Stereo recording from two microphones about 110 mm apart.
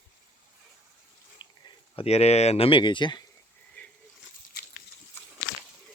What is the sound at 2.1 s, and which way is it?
Speech, 75° left (ahead or behind).